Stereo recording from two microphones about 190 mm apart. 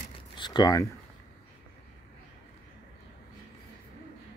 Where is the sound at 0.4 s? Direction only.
25° left (ahead or behind).